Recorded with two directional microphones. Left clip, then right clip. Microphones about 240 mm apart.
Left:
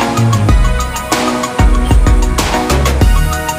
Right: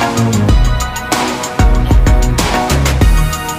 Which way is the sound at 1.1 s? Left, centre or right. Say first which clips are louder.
Left 2 dB; centre.